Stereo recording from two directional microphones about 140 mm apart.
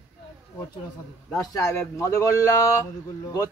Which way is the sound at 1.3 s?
20° left (ahead or behind).